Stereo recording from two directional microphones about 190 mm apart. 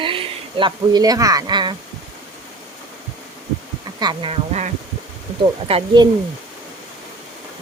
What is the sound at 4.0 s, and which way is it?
Speech, 20° right (ahead or behind).